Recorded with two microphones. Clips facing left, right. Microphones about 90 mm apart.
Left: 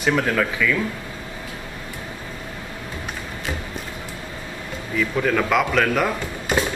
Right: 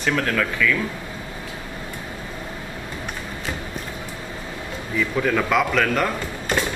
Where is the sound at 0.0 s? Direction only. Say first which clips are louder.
Left 2 dB; 10° left (ahead or behind).